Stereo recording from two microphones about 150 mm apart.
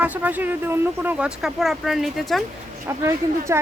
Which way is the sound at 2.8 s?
20° right (ahead or behind).